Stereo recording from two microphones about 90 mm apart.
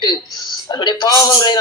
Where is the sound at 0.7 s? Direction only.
50° left (ahead or behind).